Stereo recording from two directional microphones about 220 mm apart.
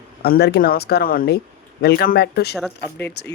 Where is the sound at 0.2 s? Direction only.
45° left (ahead or behind).